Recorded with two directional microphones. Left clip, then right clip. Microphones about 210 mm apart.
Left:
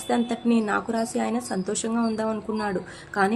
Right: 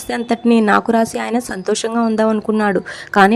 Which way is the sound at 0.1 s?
40° right (ahead or behind).